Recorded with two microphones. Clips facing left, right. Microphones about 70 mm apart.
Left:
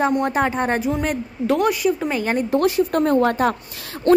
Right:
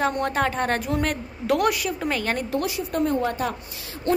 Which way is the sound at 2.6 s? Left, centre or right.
Left.